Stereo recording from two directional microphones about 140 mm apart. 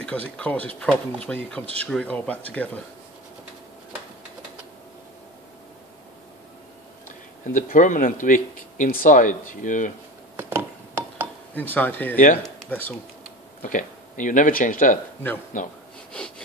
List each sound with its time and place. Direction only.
0.0 s speech: 10° left (ahead or behind)
7.1 s speech: 65° left (ahead or behind)
10.3 s a sound: 15° right (ahead or behind)
11.5 s speech: 10° left (ahead or behind)
13.6 s speech: 70° left (ahead or behind)